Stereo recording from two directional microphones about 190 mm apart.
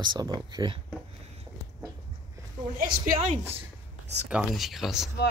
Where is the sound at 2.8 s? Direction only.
45° right (ahead or behind).